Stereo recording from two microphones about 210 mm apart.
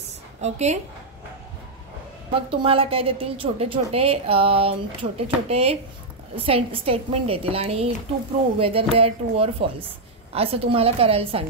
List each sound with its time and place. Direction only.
0.4 s a woman's voice: 30° right (ahead or behind)
2.6 s a woman's voice: 25° right (ahead or behind)